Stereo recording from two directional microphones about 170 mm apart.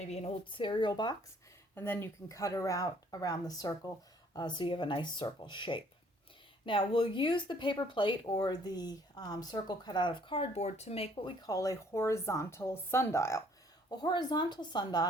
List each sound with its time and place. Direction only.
0.0 s speech: 40° left (ahead or behind)
1.7 s speech: 15° left (ahead or behind)